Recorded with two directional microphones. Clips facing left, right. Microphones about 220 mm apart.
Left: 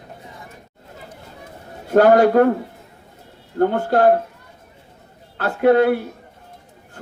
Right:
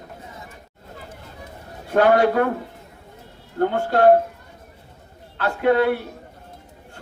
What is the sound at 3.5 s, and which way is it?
Speech, 45° left (ahead or behind).